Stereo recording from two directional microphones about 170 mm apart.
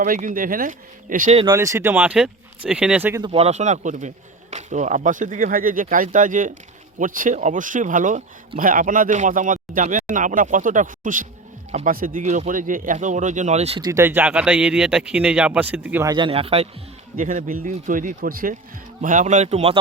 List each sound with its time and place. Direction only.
0.0 s speech: 50° right (ahead or behind)
1.5 s speech: 15° right (ahead or behind)
3.2 s speech: 30° right (ahead or behind)
13.8 s speech: 15° right (ahead or behind)
16.1 s speech: 30° right (ahead or behind)
17.2 s speech: 50° right (ahead or behind)
19.0 s speech: 45° right (ahead or behind)